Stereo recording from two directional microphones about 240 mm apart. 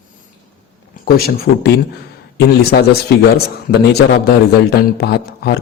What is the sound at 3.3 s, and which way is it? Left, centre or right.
A man's voice, left.